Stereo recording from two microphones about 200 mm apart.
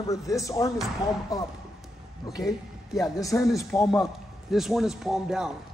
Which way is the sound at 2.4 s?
Centre (ahead or behind).